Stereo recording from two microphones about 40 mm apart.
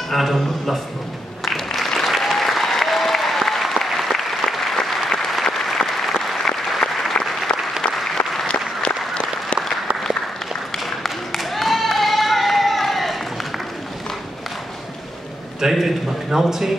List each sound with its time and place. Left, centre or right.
0.1 s a man's voice: centre
1.4 s applause: centre
8.5 s applause: left
11.0 s a sound: centre
15.7 s a man's voice: centre